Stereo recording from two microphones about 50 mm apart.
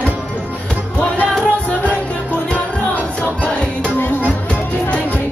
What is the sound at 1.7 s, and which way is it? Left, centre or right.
Music, left.